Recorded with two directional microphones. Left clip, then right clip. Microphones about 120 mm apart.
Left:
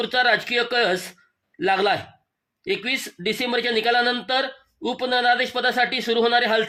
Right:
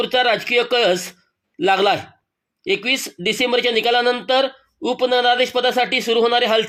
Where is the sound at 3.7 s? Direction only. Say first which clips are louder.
Right 1 dB; 15° right (ahead or behind).